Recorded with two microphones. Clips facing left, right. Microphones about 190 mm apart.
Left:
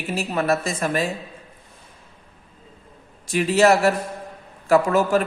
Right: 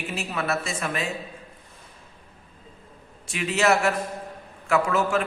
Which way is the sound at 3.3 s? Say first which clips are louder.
Left 6 dB; 40° left (ahead or behind).